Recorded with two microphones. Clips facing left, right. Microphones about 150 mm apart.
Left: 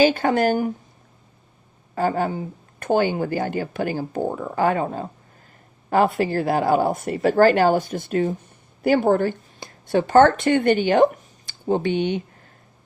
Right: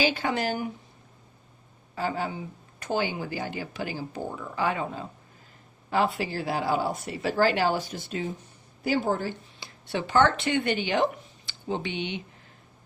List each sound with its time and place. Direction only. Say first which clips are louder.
0.0 s speech: left 9 dB; 50° left (ahead or behind)
2.0 s speech: left 8 dB; 50° left (ahead or behind)